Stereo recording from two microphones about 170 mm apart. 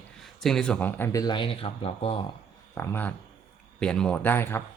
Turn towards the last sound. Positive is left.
turn(degrees=15)  # may be behind; listen again after turning